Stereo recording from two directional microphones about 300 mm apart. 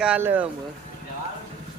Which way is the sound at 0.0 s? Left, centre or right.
Centre.